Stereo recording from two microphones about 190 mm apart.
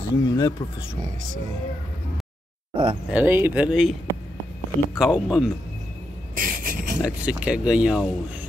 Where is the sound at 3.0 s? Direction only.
10° right (ahead or behind).